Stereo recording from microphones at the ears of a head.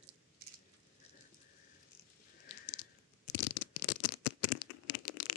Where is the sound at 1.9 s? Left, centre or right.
Left.